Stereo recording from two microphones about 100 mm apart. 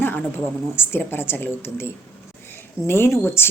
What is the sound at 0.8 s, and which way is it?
Speech, 20° left (ahead or behind).